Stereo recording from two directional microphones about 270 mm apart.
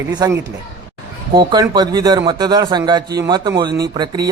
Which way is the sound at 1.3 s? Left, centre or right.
Centre.